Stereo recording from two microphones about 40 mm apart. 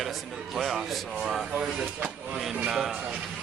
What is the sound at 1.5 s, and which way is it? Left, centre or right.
Speech, right.